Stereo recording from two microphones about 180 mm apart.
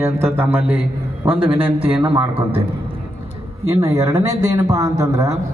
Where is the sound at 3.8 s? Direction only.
20° right (ahead or behind).